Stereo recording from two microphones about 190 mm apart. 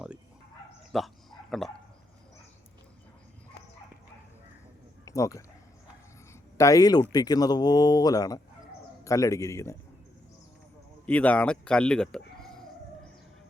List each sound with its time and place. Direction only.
0.9 s bow-wow: centre (ahead or behind)
5.0 s speech: 15° left (ahead or behind)
6.6 s a man's voice: 20° left (ahead or behind)
11.0 s speech: 5° left (ahead or behind)